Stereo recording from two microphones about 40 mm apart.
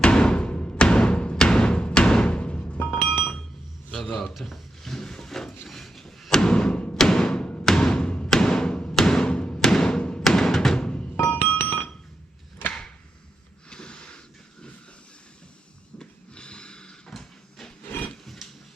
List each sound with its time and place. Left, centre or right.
0.0 s music: left
2.8 s chink: left
3.9 s a man's voice: centre
4.4 s drawer open or close: centre
5.6 s a sound: centre
6.4 s thump: centre
6.9 s music: centre
9.0 s thump: centre
9.6 s music: centre
10.2 s music: centre
11.0 s music: left
11.3 s music: left
13.7 s snort: left
16.0 s a sound: left